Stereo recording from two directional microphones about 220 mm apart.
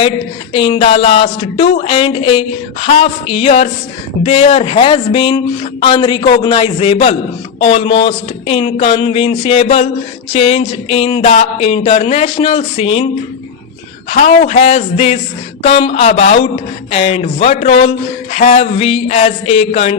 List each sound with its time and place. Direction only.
0.5 s speech: 25° left (ahead or behind)
14.1 s speech: 30° left (ahead or behind)